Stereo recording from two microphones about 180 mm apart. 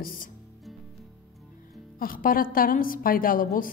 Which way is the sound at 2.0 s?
50° left (ahead or behind).